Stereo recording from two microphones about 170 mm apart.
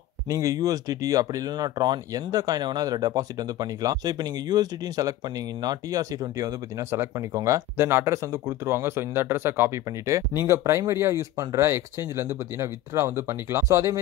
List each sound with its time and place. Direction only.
0.3 s speech: 20° right (ahead or behind)